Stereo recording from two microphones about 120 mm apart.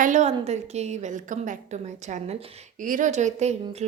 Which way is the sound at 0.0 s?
80° right.